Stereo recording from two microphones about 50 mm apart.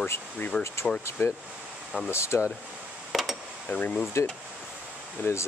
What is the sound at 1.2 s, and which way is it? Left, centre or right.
Speech, left.